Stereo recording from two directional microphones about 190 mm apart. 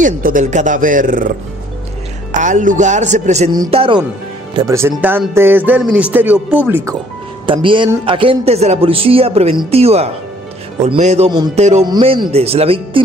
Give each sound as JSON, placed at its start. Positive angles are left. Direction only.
{"t": 0.0, "sound": "speech", "side_deg": -45}
{"t": 2.3, "sound": "speech", "side_deg": -40}
{"t": 4.6, "sound": "speech", "side_deg": -15}
{"t": 7.4, "sound": "speech", "side_deg": -25}
{"t": 11.2, "sound": "speech", "side_deg": -20}
{"t": 11.5, "sound": "speech", "side_deg": -35}